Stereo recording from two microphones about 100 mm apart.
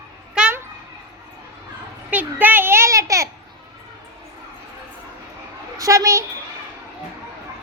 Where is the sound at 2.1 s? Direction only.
15° right (ahead or behind).